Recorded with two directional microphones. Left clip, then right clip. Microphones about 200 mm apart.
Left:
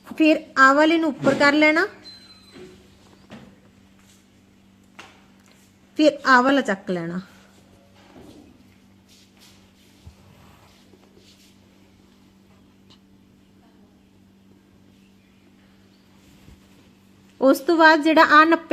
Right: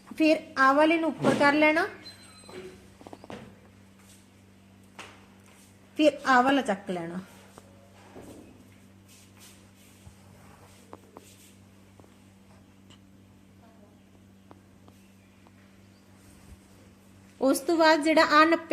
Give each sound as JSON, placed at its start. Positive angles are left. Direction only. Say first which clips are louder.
{"t": 0.2, "sound": "a woman's voice", "louder": "left 7 dB", "side_deg": 50}
{"t": 6.0, "sound": "a woman's voice", "louder": "left 6 dB", "side_deg": 50}
{"t": 17.3, "sound": "a woman's voice", "louder": "left 7 dB", "side_deg": 40}